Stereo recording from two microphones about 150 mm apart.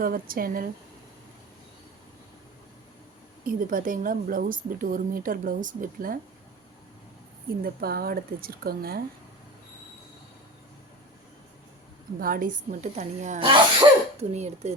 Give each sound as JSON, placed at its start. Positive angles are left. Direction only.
{"t": 0.0, "sound": "a woman's voice", "side_deg": -75}
{"t": 3.4, "sound": "a woman's voice", "side_deg": -65}
{"t": 7.6, "sound": "speech", "side_deg": -90}
{"t": 12.2, "sound": "a woman's voice", "side_deg": -70}
{"t": 13.4, "sound": "speech", "side_deg": -35}